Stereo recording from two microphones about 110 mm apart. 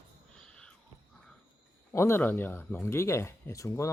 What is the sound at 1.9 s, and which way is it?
Speech, 25° left (ahead or behind).